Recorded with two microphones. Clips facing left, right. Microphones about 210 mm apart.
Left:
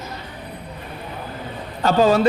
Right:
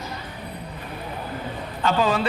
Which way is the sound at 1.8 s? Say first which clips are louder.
Left 6 dB; 40° left (ahead or behind).